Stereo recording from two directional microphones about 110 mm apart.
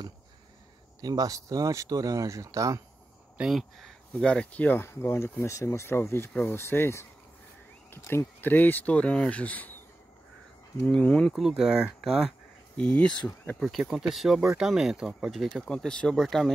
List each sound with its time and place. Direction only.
1.0 s speech: 30° right (ahead or behind)
3.3 s speech: centre (ahead or behind)
4.1 s speech: 10° left (ahead or behind)
10.9 s speech: 10° left (ahead or behind)
11.3 s speech: 5° right (ahead or behind)
12.7 s speech: 10° left (ahead or behind)
13.6 s speech: centre (ahead or behind)